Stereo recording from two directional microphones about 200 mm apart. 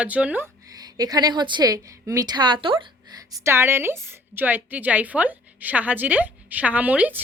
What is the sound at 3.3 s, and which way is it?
A woman's voice, 15° right (ahead or behind).